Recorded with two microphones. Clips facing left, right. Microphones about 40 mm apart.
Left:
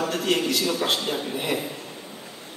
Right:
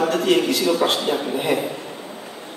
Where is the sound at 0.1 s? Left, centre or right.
Centre.